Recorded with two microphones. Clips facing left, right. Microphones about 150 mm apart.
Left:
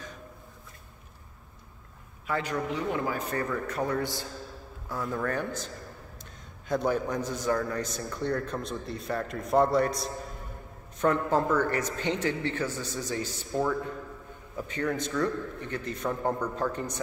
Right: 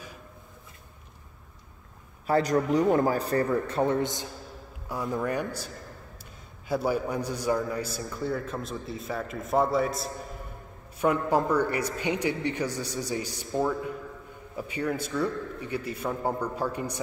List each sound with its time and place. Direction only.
2.2 s a man's voice: 35° right (ahead or behind); by 5.7 s 10° right (ahead or behind)
6.7 s a man's voice: 10° right (ahead or behind)